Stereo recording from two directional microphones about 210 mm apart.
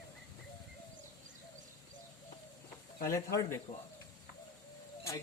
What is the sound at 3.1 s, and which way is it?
Speech, 15° left (ahead or behind).